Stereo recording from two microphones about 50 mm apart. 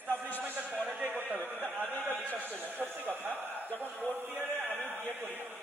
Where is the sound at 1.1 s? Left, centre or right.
Right.